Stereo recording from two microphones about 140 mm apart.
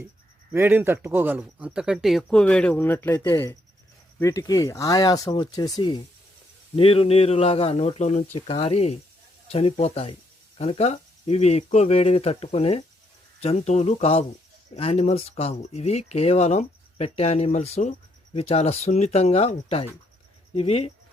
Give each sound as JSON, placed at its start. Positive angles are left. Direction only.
{"t": 0.5, "sound": "speech", "side_deg": -15}
{"t": 6.7, "sound": "speech", "side_deg": 40}